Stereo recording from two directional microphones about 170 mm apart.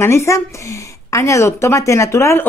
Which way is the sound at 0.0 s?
15° left (ahead or behind).